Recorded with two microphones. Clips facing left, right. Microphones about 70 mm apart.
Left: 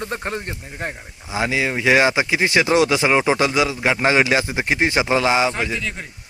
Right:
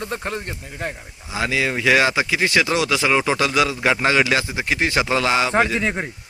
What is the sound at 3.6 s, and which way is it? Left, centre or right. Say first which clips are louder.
Speech: even; centre.